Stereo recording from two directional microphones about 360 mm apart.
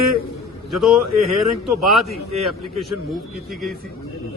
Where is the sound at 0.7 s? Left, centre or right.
Centre.